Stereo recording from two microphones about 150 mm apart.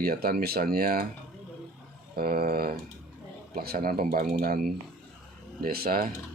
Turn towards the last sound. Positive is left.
turn(degrees=-80)